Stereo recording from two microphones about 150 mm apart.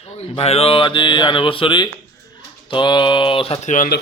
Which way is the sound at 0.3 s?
40° left (ahead or behind).